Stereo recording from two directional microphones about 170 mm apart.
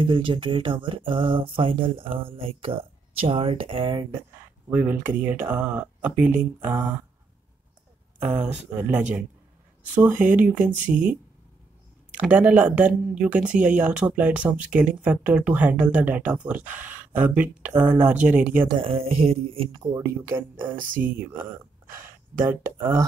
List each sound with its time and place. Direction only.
0.0 s speech: 30° right (ahead or behind)
4.6 s speech: 10° right (ahead or behind)
8.2 s speech: 10° right (ahead or behind)
12.2 s speech: 10° right (ahead or behind)
18.7 s speech: 35° right (ahead or behind)
19.8 s speech: 15° right (ahead or behind)